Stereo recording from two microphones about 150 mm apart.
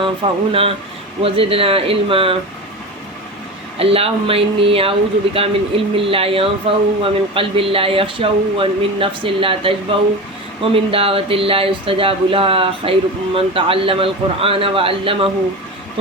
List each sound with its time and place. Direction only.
0.0 s speech: 35° right (ahead or behind)
3.8 s speech: 40° right (ahead or behind)